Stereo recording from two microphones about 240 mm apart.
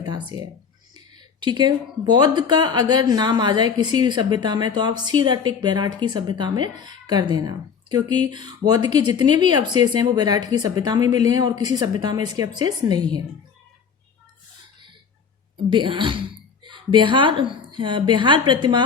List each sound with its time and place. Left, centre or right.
0.0 s a sound: centre
0.9 s a woman's voice: centre
15.7 s a woman's voice: centre